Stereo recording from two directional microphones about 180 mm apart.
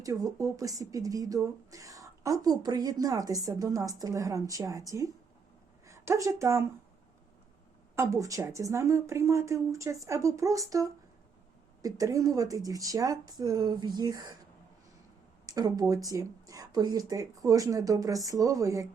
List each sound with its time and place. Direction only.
0.0 s speech: 20° right (ahead or behind)
7.9 s speech: 15° right (ahead or behind)
15.4 s speech: 20° right (ahead or behind)